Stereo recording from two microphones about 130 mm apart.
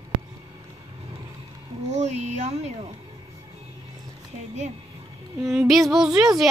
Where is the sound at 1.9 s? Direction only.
60° right (ahead or behind).